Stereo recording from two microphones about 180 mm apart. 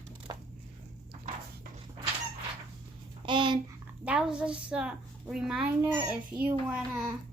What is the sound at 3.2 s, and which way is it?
Speech, 25° right (ahead or behind).